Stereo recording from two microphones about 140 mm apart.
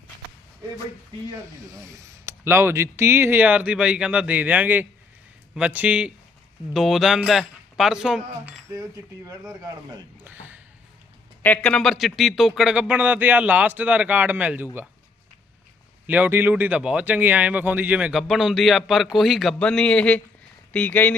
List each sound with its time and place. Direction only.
1.3 s speech: 20° right (ahead or behind); by 8.5 s 5° right (ahead or behind)
8.7 s speech: 25° right (ahead or behind)
10.2 s speech: 15° right (ahead or behind)
11.4 s speech: 10° left (ahead or behind); by 14.7 s 10° right (ahead or behind)
16.0 s speech: 15° right (ahead or behind); by 21.2 s 10° left (ahead or behind)